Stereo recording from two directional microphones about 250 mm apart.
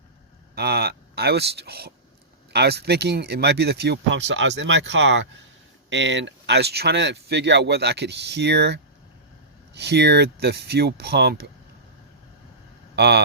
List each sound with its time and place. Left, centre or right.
0.5 s speech: right
13.0 s speech: right